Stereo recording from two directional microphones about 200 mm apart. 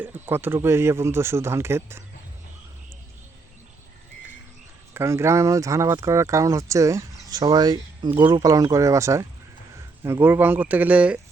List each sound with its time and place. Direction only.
0.0 s speech: 10° right (ahead or behind)
4.9 s speech: 15° right (ahead or behind)